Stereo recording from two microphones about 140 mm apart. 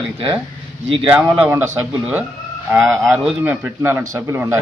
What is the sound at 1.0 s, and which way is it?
A man's voice, 10° right (ahead or behind).